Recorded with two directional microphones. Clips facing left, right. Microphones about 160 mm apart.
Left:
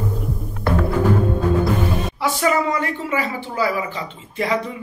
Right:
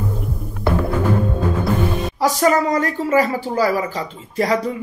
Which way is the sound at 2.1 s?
40° right (ahead or behind).